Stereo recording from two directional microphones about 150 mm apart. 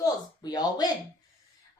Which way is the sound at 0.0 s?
25° left (ahead or behind).